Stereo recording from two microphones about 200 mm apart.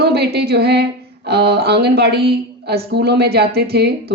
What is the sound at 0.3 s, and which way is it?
Speech, 55° right (ahead or behind).